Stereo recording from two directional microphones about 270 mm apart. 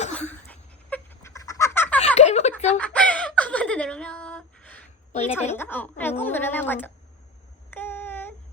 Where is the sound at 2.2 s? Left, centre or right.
Left.